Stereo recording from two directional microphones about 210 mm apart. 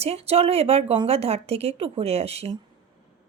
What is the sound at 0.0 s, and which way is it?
A woman's voice, 30° right (ahead or behind).